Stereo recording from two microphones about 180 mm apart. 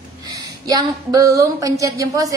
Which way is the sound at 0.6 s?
20° right (ahead or behind).